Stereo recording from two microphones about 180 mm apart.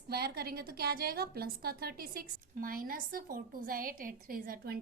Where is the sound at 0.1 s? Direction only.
60° right (ahead or behind).